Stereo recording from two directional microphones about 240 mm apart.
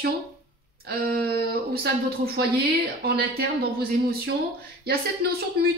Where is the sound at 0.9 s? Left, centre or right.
Right.